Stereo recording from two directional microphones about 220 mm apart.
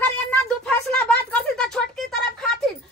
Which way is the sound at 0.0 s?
5° left (ahead or behind).